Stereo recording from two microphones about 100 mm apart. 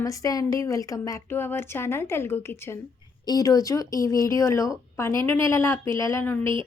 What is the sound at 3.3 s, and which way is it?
A woman's voice, 35° left (ahead or behind).